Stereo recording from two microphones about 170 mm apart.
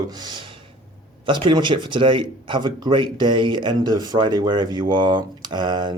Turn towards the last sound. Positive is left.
turn(degrees=-25)  # may be behind; listen again after turning